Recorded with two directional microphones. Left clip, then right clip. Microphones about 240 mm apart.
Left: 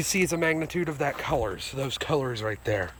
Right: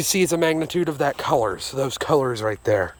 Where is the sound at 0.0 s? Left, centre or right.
Right.